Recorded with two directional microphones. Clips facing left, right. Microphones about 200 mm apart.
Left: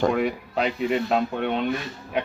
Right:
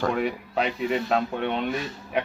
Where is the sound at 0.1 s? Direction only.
Centre (ahead or behind).